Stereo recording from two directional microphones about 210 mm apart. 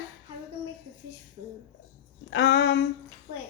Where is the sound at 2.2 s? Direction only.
55° left (ahead or behind).